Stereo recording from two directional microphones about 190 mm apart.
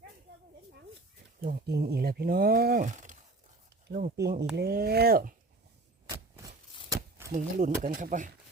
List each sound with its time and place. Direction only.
1.4 s speech: 55° right (ahead or behind)
4.2 s speech: 60° right (ahead or behind)
7.3 s speech: 45° right (ahead or behind)